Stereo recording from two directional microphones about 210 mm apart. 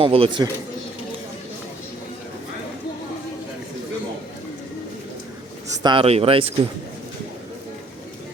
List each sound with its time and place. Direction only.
0.0 s speech: 25° right (ahead or behind)
5.8 s speech: 25° right (ahead or behind)